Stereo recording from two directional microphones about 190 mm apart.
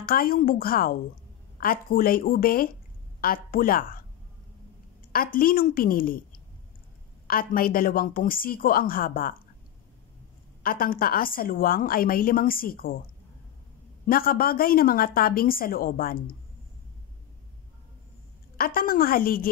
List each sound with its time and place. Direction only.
0.0 s a woman's voice: 50° left (ahead or behind)
5.1 s a woman's voice: 50° left (ahead or behind)
7.2 s a woman's voice: 50° left (ahead or behind)
10.6 s a woman's voice: 50° left (ahead or behind)
14.0 s a woman's voice: 50° left (ahead or behind)
18.6 s a woman's voice: 50° left (ahead or behind)